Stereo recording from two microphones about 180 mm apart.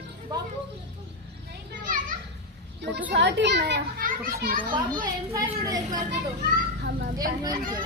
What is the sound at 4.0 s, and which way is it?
Speech, 50° right (ahead or behind).